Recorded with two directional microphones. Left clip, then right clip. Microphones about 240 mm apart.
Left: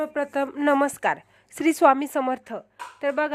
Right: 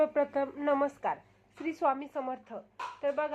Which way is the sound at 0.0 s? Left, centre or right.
Left.